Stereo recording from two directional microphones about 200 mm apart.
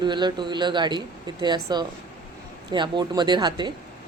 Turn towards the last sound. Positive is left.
turn(degrees=-20)  # may be behind; listen again after turning